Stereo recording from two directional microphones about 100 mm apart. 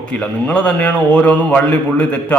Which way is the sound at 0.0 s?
10° left (ahead or behind).